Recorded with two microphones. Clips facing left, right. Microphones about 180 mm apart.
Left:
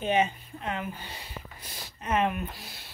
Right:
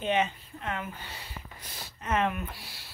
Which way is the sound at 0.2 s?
20° left (ahead or behind).